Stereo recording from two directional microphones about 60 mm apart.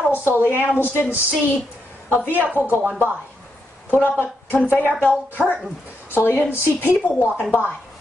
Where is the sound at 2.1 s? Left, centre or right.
Left.